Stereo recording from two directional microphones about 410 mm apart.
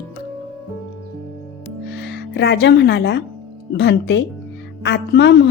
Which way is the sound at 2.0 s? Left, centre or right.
Left.